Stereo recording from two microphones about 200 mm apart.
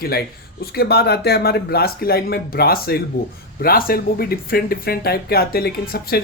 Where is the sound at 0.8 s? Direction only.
50° left (ahead or behind).